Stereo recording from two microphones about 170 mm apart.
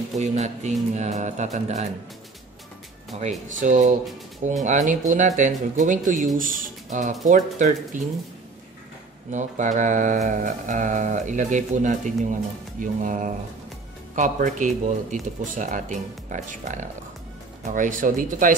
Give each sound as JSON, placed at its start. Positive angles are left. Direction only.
{"t": 0.2, "sound": "speech", "side_deg": -40}
{"t": 3.2, "sound": "speech", "side_deg": -45}
{"t": 9.3, "sound": "speech", "side_deg": -45}